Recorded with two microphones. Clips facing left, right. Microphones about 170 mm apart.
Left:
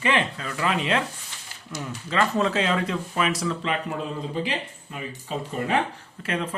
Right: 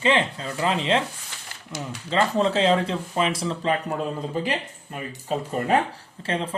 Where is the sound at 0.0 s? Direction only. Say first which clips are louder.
Right 2 dB; 25° right (ahead or behind); by 5.7 s 50° right (ahead or behind).